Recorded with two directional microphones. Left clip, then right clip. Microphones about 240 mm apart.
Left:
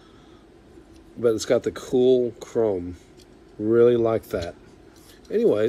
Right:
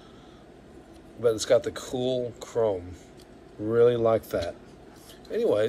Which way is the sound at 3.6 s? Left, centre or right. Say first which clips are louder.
Left 3 dB; left.